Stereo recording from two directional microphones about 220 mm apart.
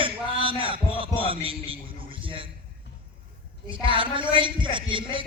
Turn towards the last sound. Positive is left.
turn(degrees=-20)  # may be behind; listen again after turning